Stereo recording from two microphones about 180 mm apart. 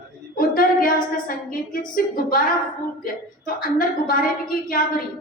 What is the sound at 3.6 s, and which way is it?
A woman's voice, 50° left (ahead or behind).